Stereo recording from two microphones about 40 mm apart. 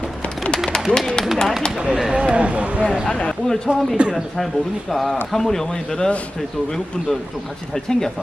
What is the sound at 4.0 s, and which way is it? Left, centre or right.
Speech, right.